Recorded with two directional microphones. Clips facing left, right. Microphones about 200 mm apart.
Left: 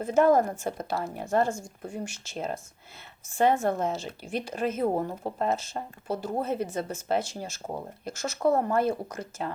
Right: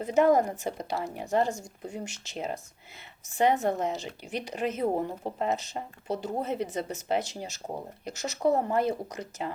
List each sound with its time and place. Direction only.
0.0 s speech: 15° right (ahead or behind)